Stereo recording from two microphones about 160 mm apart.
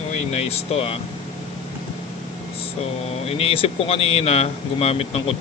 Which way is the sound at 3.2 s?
35° left (ahead or behind).